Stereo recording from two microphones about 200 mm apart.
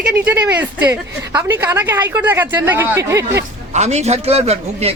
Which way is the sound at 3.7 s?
35° right (ahead or behind).